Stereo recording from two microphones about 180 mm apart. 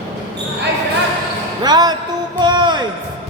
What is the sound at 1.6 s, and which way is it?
Speech, 20° right (ahead or behind).